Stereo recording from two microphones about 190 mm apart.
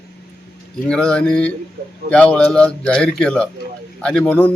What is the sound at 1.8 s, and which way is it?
Speech, 45° right (ahead or behind).